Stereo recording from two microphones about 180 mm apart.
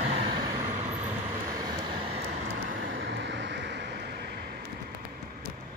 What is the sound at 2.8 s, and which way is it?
Vehicle, 85° right.